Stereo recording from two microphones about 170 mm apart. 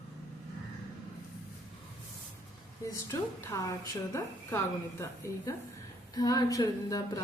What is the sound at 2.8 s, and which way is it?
Speech, 15° left (ahead or behind).